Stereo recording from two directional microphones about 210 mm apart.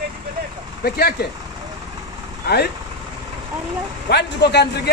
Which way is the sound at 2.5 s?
50° left (ahead or behind).